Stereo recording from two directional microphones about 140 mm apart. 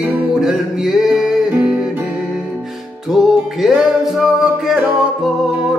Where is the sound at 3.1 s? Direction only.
Centre (ahead or behind).